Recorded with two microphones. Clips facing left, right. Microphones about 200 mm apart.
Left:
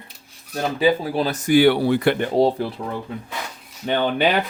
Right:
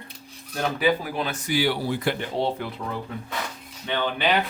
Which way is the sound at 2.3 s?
35° left (ahead or behind).